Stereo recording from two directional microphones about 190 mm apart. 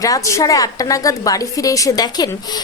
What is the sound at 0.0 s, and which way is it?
A woman's voice, 15° left (ahead or behind).